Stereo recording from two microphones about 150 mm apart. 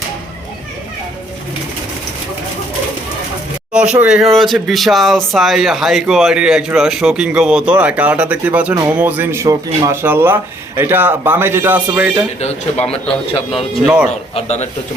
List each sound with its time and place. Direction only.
3.7 s speech: 5° right (ahead or behind)
13.8 s speech: 5° right (ahead or behind)
14.3 s speech: 50° left (ahead or behind)